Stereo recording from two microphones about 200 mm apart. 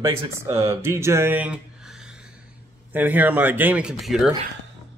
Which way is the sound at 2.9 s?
10° right (ahead or behind).